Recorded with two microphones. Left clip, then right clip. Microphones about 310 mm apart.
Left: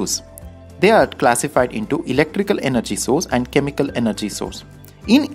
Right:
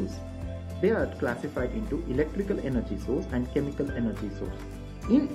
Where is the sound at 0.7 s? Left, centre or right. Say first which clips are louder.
Left 13 dB; left.